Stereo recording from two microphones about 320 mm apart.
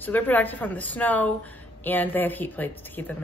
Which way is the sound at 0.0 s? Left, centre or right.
Centre.